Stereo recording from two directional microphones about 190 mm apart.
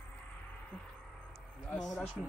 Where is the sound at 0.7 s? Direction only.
5° left (ahead or behind).